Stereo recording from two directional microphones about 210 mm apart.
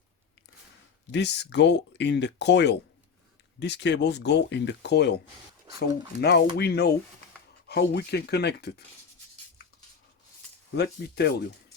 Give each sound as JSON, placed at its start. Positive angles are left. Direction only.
{"t": 1.1, "sound": "speech", "side_deg": 55}
{"t": 10.8, "sound": "speech", "side_deg": 50}